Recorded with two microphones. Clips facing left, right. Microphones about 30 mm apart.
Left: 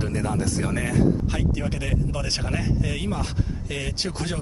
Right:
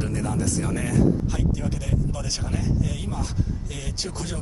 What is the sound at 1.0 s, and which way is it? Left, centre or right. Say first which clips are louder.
Speech: right 1 dB; left.